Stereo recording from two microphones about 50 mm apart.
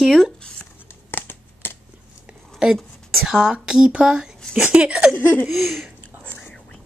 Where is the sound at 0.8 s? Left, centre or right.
Left.